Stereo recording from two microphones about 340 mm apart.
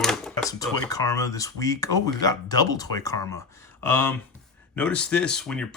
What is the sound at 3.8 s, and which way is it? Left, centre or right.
Speech, centre.